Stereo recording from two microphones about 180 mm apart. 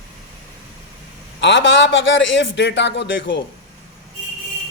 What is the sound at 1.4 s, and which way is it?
A man's voice, 90° left.